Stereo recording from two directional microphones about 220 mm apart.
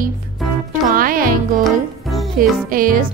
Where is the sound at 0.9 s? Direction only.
40° right (ahead or behind).